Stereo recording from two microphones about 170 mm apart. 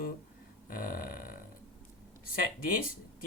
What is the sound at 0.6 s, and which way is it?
Burping, 55° left (ahead or behind).